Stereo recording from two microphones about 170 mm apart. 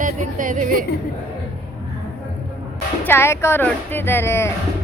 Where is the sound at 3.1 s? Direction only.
15° left (ahead or behind).